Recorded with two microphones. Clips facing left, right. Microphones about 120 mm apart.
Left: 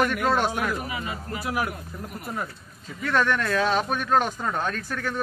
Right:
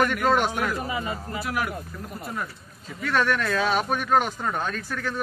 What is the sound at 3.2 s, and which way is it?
Speech, 15° right (ahead or behind).